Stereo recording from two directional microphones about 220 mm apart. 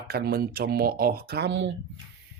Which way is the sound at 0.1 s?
45° right (ahead or behind).